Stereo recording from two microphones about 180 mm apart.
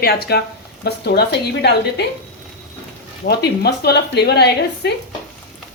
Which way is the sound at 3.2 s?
65° left (ahead or behind).